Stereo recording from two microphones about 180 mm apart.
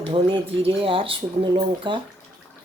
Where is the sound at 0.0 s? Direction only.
30° right (ahead or behind).